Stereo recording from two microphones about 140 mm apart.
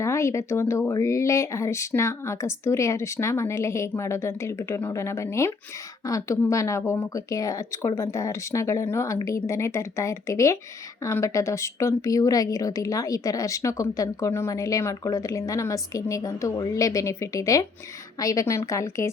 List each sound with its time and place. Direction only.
0.0 s speech: 20° left (ahead or behind)